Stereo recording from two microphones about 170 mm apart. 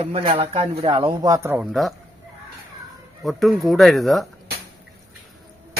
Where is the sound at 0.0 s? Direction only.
35° right (ahead or behind); by 1.6 s 15° right (ahead or behind).